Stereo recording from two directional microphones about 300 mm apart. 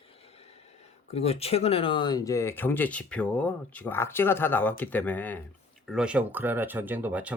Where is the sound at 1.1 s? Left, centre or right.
Left.